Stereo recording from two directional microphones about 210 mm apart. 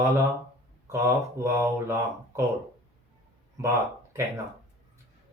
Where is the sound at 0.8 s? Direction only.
10° right (ahead or behind).